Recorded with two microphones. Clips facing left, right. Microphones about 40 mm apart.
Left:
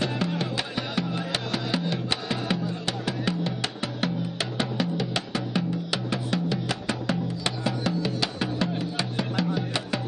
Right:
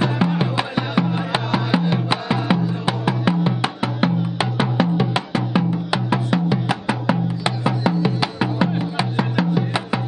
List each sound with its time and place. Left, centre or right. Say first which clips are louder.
0.0 s music: right 7 dB; right